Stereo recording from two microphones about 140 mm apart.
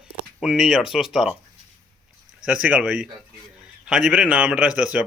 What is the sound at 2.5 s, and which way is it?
A man's voice, 10° right (ahead or behind).